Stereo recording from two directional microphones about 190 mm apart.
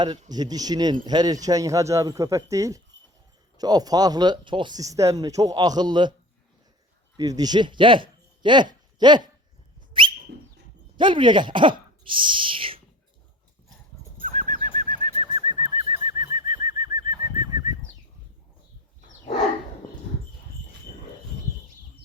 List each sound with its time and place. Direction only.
0.0 s speech: 20° right (ahead or behind)
7.2 s speech: 20° right (ahead or behind)
10.0 s whistle: 25° right (ahead or behind)
10.9 s speech: 25° right (ahead or behind)
14.3 s bird: 40° right (ahead or behind); by 17.7 s 20° right (ahead or behind)